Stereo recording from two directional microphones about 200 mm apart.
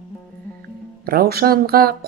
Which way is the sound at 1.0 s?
50° right (ahead or behind).